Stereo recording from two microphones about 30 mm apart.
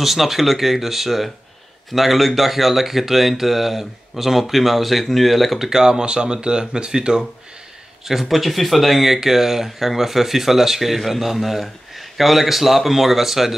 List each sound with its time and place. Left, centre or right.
0.0 s speech: centre
5.6 s speech: centre
8.0 s speech: centre